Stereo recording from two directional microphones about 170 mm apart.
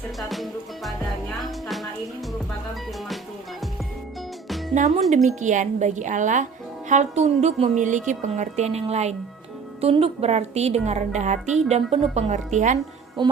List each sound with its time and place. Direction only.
0.2 s music: centre (ahead or behind)
4.8 s a woman's voice: 50° right (ahead or behind)